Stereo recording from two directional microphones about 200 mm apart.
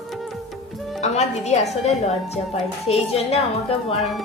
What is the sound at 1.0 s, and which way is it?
A woman's voice, 35° left (ahead or behind).